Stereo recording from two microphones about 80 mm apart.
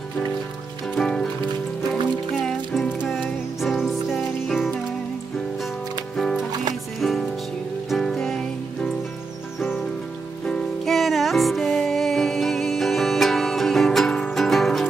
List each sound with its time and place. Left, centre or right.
0.9 s music: centre
2.4 s music: centre
6.7 s music: centre
10.4 s music: centre